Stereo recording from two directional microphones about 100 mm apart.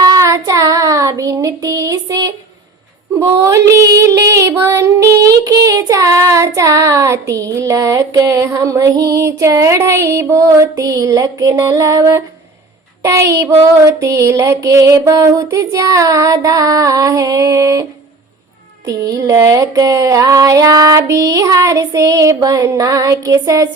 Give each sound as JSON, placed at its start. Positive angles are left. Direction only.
{"t": 0.0, "sound": "child singing", "side_deg": -35}
{"t": 3.2, "sound": "female singing", "side_deg": -30}
{"t": 13.0, "sound": "music", "side_deg": -30}
{"t": 18.9, "sound": "music", "side_deg": -35}